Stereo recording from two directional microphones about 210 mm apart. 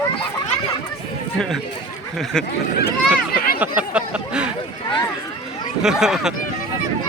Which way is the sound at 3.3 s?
45° left (ahead or behind).